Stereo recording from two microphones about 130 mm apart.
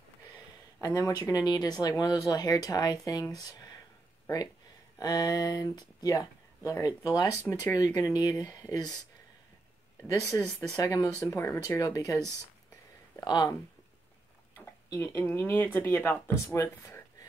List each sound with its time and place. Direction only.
0.7 s speech: 25° left (ahead or behind)
4.9 s speech: 30° left (ahead or behind)
10.0 s speech: 25° left (ahead or behind)
10.4 s speech: 5° left (ahead or behind)
10.8 s speech: 25° left (ahead or behind)
13.2 s speech: 35° left (ahead or behind)
14.9 s speech: 15° left (ahead or behind)